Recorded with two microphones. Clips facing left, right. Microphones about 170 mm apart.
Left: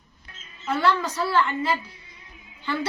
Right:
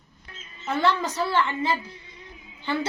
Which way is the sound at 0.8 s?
20° right (ahead or behind).